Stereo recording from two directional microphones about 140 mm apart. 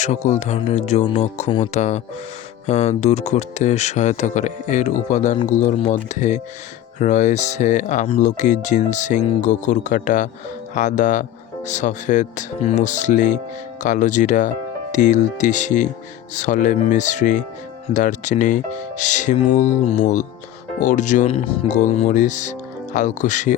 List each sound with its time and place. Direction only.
0.0 s speech: 55° left (ahead or behind)
21.2 s speech: 45° left (ahead or behind)
21.7 s speech: 60° left (ahead or behind)